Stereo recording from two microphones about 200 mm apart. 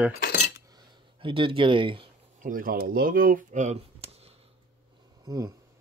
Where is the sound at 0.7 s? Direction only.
25° right (ahead or behind).